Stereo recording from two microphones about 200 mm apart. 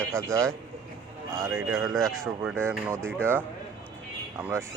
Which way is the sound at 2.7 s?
10° right (ahead or behind).